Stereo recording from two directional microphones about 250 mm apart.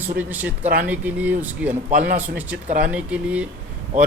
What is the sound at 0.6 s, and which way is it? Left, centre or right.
Speech, right.